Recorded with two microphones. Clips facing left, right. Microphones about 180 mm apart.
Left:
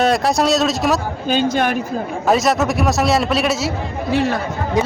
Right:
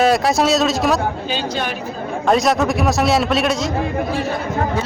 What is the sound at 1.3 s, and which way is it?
Speech, 50° left (ahead or behind).